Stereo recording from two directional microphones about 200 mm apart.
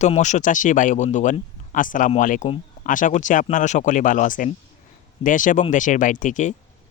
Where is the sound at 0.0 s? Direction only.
35° left (ahead or behind).